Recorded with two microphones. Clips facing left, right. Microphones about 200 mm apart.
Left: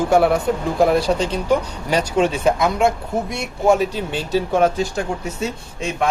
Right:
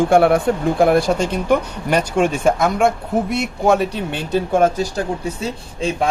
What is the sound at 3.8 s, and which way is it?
Speech, 60° right (ahead or behind).